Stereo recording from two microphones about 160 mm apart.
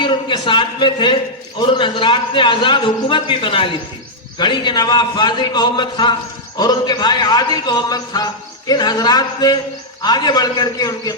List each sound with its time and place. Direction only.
0.0 s a man's voice: 30° left (ahead or behind)